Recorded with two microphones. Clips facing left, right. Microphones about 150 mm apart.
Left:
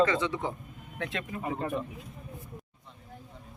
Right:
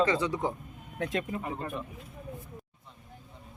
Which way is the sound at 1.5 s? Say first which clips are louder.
Left 4 dB; 25° left (ahead or behind).